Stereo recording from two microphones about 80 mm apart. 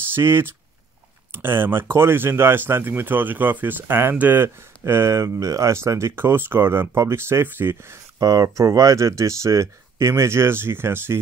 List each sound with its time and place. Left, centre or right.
0.1 s speech: right
8.2 s speech: right